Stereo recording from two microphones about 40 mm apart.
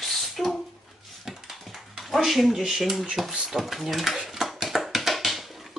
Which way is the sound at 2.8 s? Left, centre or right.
Centre.